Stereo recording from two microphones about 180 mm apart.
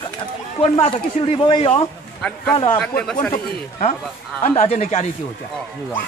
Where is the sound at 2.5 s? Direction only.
30° left (ahead or behind).